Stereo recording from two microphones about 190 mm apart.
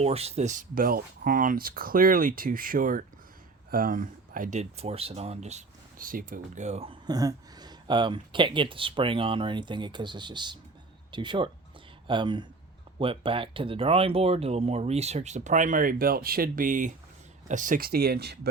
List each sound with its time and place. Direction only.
0.0 s speech: 35° right (ahead or behind); by 18.3 s 60° right (ahead or behind)